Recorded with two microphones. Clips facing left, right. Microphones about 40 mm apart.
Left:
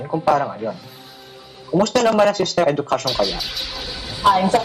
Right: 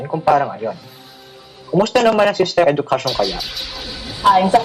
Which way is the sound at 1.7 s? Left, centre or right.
Right.